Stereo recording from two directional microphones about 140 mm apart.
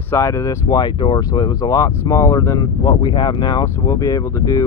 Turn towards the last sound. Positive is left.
turn(degrees=25)  # may be behind; listen again after turning